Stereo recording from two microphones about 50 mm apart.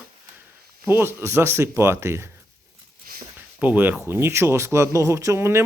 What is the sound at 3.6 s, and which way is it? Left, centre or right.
Speech, right.